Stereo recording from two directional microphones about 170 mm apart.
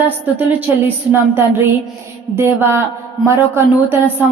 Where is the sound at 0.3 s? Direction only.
10° right (ahead or behind).